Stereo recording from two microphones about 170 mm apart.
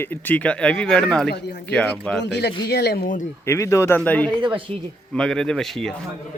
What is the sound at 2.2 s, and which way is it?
Speech, 80° left.